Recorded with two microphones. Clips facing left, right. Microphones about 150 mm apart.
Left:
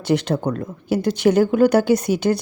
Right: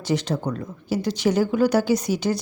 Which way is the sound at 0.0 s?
60° left (ahead or behind).